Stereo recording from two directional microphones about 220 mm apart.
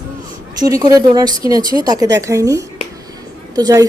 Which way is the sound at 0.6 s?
15° right (ahead or behind).